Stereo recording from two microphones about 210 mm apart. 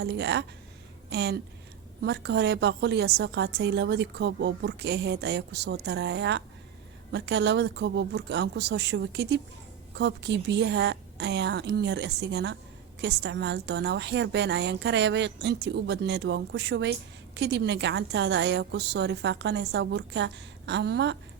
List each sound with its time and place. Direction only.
0.0 s a woman's voice: 55° right (ahead or behind)